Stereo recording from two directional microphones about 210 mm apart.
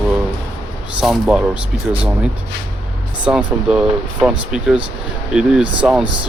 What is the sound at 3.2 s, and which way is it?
Speech, 5° right (ahead or behind).